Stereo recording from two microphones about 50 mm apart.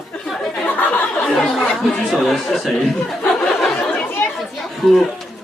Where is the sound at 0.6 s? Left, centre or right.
Left.